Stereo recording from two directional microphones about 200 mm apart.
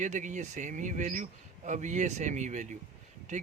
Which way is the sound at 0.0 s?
40° right (ahead or behind).